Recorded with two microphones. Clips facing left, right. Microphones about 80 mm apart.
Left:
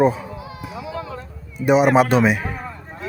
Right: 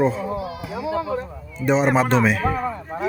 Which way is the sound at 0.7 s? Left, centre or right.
Right.